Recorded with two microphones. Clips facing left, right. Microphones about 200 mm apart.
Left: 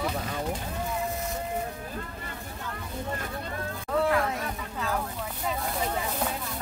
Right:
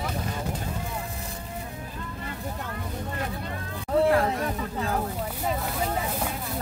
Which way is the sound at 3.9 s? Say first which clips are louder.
Right 4 dB; 35° right (ahead or behind).